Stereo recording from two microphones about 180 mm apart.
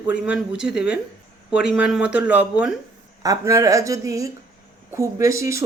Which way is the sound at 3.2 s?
20° right (ahead or behind).